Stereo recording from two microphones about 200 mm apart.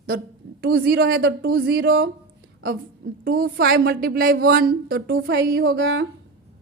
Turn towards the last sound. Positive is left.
turn(degrees=-65)  # may be behind; listen again after turning